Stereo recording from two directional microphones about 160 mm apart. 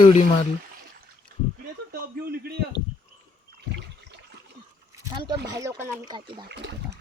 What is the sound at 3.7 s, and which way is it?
Water, 90° right.